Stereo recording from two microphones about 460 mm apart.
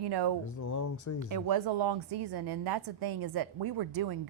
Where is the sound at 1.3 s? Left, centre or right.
Right.